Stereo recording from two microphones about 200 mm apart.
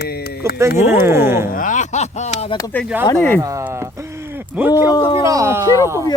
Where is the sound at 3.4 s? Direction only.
15° right (ahead or behind).